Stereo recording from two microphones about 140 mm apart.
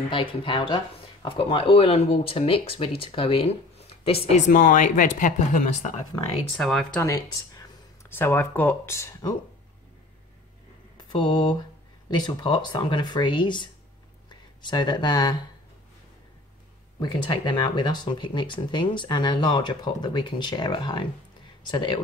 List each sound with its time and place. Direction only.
0.1 s speech: 35° left (ahead or behind)
4.5 s speech: 75° left (ahead or behind); by 5.9 s 60° left (ahead or behind)
6.5 s speech: 5° left (ahead or behind)
7.0 s speech: 25° left (ahead or behind)
11.0 s mantra: 30° left (ahead or behind)
12.1 s speech: 30° left (ahead or behind)
17.0 s speech: 30° left (ahead or behind)